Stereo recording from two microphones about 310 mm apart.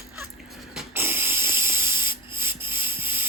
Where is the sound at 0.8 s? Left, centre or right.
Centre.